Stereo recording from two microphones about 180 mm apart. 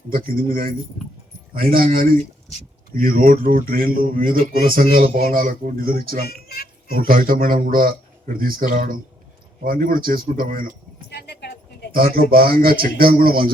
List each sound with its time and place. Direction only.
0.1 s speech: 55° right (ahead or behind)
1.7 s speech: 50° right (ahead or behind)
6.2 s a sound: 60° left (ahead or behind)
6.9 s speech: 50° right (ahead or behind)
11.1 s a sound: 65° left (ahead or behind)
11.9 s speech: 55° right (ahead or behind)